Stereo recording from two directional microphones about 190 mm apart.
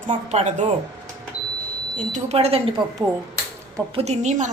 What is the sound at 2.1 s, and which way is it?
Speech, 35° right (ahead or behind).